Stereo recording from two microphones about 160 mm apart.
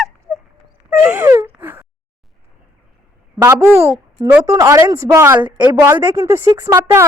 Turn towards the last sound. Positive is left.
turn(degrees=-15)  # may be behind; listen again after turning